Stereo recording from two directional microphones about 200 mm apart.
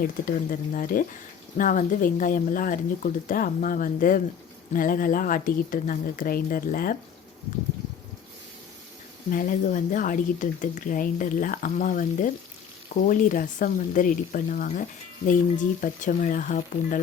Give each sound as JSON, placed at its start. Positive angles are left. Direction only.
{"t": 0.0, "sound": "a woman's voice", "side_deg": 45}
{"t": 9.3, "sound": "a woman's voice", "side_deg": 40}